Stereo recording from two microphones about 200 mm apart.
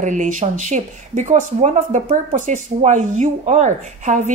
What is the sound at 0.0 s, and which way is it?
Speech, 40° right (ahead or behind).